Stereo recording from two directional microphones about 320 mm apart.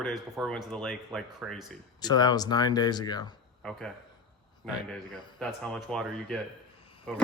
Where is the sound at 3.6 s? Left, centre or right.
Centre.